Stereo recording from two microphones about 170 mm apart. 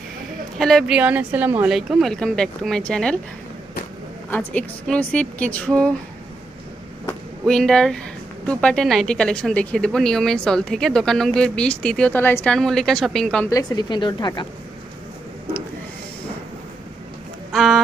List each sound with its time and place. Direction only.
0.6 s a woman's voice: centre (ahead or behind)
4.3 s a woman's voice: 10° left (ahead or behind)
7.4 s speech: 5° left (ahead or behind)
12.5 s speech: centre (ahead or behind)
13.5 s speech: 25° left (ahead or behind)
17.5 s speech: centre (ahead or behind)